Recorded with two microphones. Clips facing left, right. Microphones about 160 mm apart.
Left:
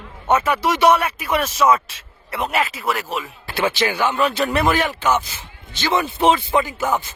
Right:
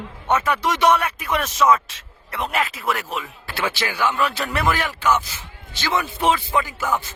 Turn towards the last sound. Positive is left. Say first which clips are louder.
# left 3 dB
turn(degrees=20)  # may be behind; listen again after turning